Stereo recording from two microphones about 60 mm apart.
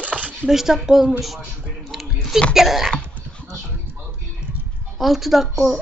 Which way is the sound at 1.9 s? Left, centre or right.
Centre.